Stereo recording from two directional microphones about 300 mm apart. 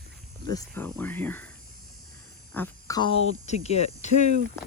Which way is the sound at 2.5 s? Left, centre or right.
Centre.